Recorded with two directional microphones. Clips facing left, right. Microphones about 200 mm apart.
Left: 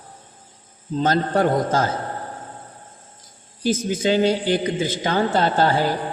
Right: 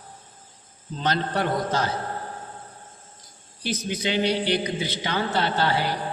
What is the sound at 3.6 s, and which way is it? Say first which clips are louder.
A man's voice: left 7 dB; 45° left (ahead or behind).